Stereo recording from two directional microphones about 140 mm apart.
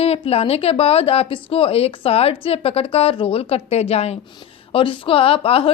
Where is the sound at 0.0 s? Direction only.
45° left (ahead or behind).